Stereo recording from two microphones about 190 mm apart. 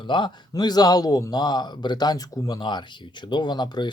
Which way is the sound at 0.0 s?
25° left (ahead or behind).